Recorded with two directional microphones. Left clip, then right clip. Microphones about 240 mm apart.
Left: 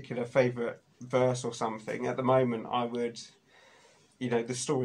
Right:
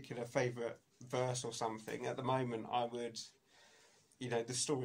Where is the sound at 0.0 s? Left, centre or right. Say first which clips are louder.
Left 11 dB; right.